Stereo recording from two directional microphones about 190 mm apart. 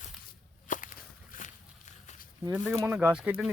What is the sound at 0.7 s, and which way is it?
Walk, 45° left (ahead or behind).